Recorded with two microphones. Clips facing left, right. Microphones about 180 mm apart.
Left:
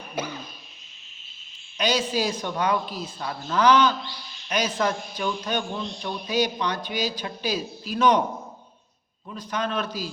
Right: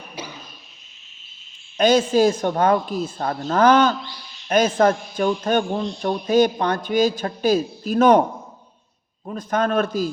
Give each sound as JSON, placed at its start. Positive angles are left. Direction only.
{"t": 0.2, "sound": "cough", "side_deg": 55}
{"t": 1.8, "sound": "a man's voice", "side_deg": -50}
{"t": 9.2, "sound": "a man's voice", "side_deg": -50}